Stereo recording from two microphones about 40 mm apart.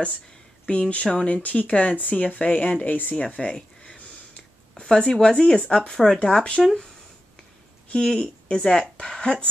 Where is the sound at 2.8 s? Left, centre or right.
Left.